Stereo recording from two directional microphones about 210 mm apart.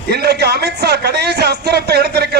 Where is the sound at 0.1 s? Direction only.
50° right (ahead or behind).